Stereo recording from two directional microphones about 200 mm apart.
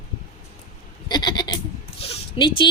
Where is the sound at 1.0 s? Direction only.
20° left (ahead or behind).